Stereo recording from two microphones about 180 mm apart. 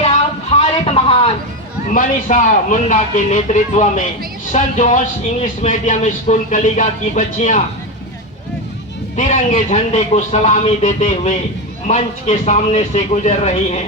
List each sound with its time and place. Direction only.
0.0 s a sound: 35° left (ahead or behind)
1.9 s a man's voice: 45° left (ahead or behind)
9.1 s a man's voice: 45° left (ahead or behind)